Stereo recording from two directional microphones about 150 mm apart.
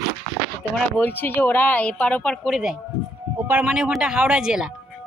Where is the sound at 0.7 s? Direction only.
10° left (ahead or behind); by 4.7 s 5° right (ahead or behind).